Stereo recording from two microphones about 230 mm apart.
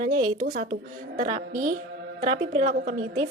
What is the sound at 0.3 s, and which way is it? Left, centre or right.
A woman's voice, right.